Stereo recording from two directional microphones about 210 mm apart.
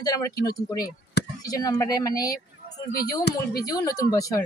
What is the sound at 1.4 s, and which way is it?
Speech, 15° left (ahead or behind).